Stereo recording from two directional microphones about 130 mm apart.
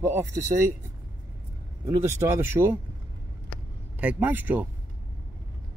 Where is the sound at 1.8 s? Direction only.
20° right (ahead or behind).